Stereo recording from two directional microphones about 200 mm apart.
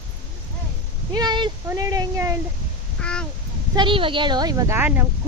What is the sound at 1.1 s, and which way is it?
Speech, 20° right (ahead or behind).